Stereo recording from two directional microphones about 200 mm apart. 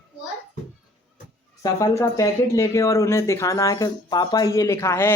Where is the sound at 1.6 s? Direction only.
15° left (ahead or behind).